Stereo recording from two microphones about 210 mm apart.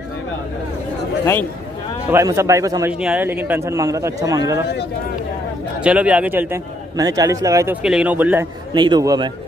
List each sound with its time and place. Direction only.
2.0 s a man's voice: 15° right (ahead or behind)
5.8 s a man's voice: 5° right (ahead or behind)
7.8 s a man's voice: 5° right (ahead or behind)
8.7 s a man's voice: 20° right (ahead or behind)